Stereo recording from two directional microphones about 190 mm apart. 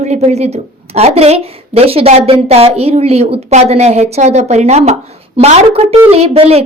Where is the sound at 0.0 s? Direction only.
35° right (ahead or behind).